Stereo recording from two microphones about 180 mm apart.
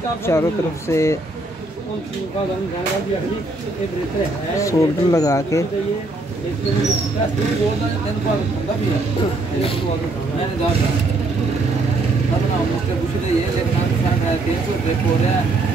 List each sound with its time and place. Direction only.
0.3 s speech: 15° left (ahead or behind)
4.6 s speech: 15° left (ahead or behind)